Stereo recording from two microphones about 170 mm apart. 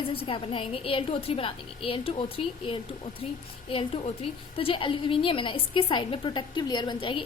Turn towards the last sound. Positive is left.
turn(degrees=30)  # may be behind; listen again after turning